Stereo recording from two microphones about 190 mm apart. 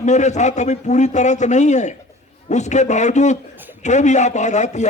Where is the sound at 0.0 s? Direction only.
40° left (ahead or behind).